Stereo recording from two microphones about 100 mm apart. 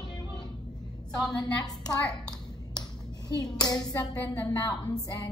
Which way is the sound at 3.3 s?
40° left (ahead or behind).